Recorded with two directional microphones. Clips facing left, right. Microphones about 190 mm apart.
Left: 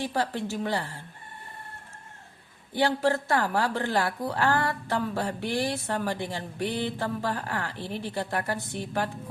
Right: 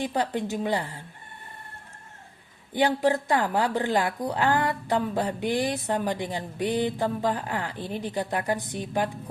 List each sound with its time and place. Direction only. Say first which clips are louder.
0.0 s a woman's voice: right 2 dB; 20° right (ahead or behind)
2.7 s a woman's voice: right 2 dB; 15° right (ahead or behind)